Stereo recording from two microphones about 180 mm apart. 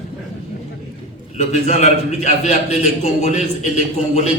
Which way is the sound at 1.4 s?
40° left (ahead or behind).